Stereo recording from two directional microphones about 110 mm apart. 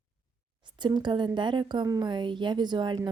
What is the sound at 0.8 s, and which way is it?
A woman's voice, 45° right (ahead or behind).